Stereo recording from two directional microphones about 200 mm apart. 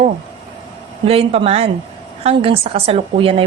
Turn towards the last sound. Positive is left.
turn(degrees=-25)  # may be behind; listen again after turning